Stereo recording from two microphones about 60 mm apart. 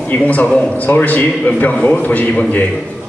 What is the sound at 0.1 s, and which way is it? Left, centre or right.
A man's voice, left.